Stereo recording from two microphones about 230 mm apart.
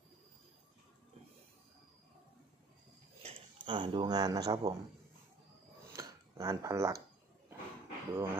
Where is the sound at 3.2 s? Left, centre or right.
Right.